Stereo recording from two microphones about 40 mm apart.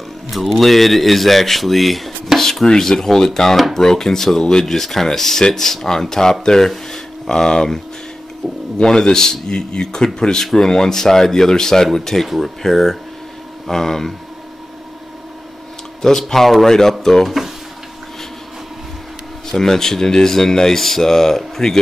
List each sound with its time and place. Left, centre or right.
0.3 s speech: centre
16.0 s speech: centre
19.5 s speech: centre